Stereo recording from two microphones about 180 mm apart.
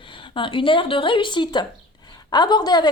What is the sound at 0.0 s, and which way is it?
A woman's voice, 30° left (ahead or behind).